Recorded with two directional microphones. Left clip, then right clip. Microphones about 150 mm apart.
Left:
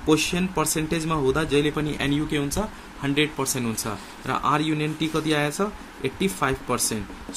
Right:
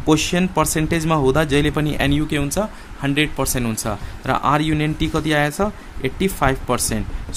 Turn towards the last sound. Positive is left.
turn(degrees=-40)  # may be behind; listen again after turning